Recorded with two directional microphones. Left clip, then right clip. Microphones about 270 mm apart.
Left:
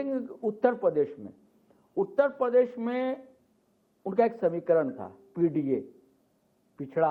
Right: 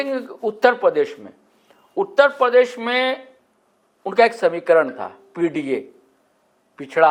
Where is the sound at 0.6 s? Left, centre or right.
Centre.